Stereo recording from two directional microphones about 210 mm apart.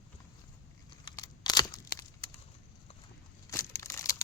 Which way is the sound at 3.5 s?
15° left (ahead or behind).